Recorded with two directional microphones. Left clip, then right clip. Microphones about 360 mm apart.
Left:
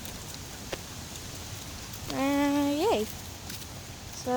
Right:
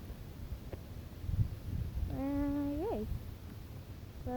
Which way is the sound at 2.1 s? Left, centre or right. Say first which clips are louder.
Left 10 dB; centre.